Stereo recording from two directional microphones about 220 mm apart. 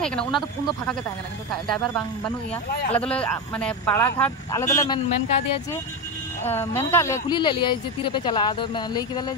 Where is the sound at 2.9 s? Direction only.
5° left (ahead or behind).